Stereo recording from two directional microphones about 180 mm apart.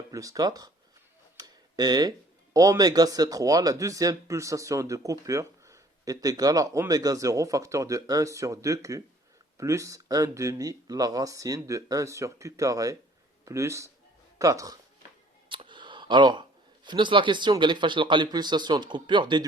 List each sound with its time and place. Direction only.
0.1 s speech: 20° right (ahead or behind)